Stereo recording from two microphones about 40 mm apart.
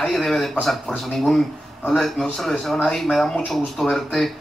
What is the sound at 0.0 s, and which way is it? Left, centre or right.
Speech, centre.